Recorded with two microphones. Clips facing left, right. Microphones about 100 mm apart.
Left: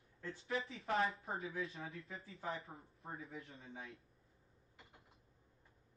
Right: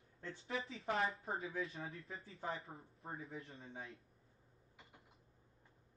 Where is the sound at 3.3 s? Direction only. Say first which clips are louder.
Right 1 dB; 30° right (ahead or behind).